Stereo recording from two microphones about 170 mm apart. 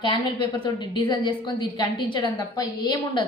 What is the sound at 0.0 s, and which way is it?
A woman's voice, 30° left (ahead or behind).